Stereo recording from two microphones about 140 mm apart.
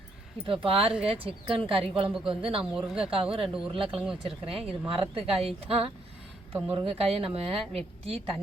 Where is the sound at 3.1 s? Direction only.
40° right (ahead or behind).